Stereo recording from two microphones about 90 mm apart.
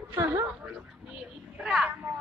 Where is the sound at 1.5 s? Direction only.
10° right (ahead or behind).